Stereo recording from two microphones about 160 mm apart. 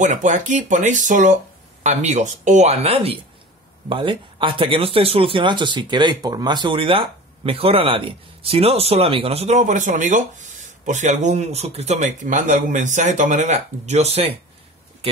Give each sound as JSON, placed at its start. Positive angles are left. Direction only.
{"t": 0.0, "sound": "speech", "side_deg": -50}
{"t": 12.0, "sound": "speech", "side_deg": -50}